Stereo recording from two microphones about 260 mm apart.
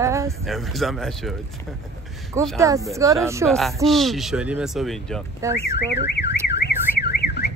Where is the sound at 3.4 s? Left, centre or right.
Centre.